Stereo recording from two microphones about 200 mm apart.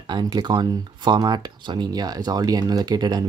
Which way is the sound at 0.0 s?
20° right (ahead or behind).